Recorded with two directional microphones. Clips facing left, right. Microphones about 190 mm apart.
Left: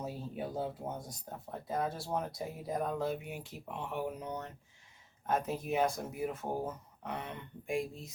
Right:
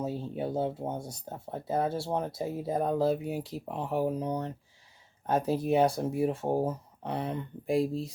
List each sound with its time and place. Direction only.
0.0 s speech: 25° right (ahead or behind)